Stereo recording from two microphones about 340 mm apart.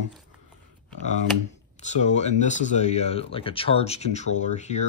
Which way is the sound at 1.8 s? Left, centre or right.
Centre.